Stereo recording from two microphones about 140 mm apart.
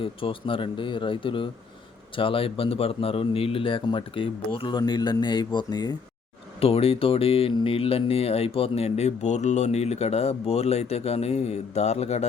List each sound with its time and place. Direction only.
0.0 s a man's voice: 40° left (ahead or behind)
6.6 s speech: 45° left (ahead or behind)